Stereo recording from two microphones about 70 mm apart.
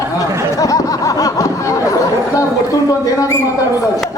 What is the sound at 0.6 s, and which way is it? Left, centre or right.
Speech, left.